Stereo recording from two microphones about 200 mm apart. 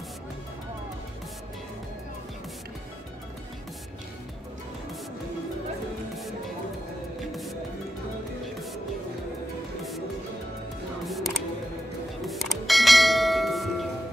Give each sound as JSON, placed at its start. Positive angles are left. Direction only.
{"t": 11.1, "sound": "music", "side_deg": 0}
{"t": 12.3, "sound": "bell", "side_deg": 0}